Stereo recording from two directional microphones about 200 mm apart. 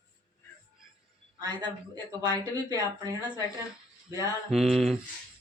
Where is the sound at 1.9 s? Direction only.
20° right (ahead or behind).